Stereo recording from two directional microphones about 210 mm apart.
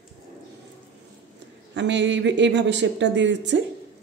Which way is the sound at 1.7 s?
55° right (ahead or behind).